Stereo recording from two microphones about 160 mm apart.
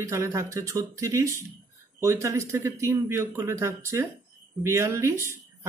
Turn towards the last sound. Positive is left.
turn(degrees=-15)  # may be behind; listen again after turning